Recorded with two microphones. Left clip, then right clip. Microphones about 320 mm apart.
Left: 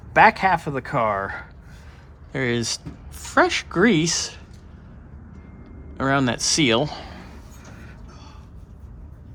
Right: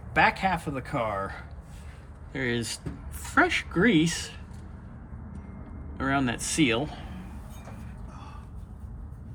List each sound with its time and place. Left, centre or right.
0.1 s speech: left
6.0 s a man's voice: left